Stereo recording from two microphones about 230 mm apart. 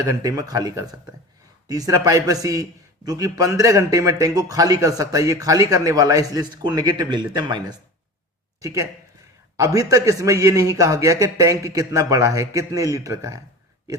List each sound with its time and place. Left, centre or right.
0.0 s a man's voice: centre
9.6 s a man's voice: centre